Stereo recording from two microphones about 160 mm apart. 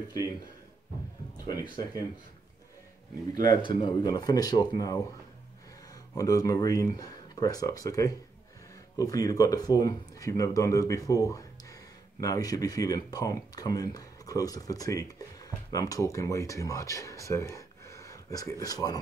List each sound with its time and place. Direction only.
3.3 s speech: 25° left (ahead or behind)
6.1 s speech: 20° left (ahead or behind)